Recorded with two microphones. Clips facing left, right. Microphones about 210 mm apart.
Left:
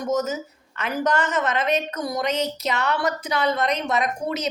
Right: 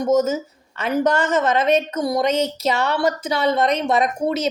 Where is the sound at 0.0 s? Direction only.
25° right (ahead or behind).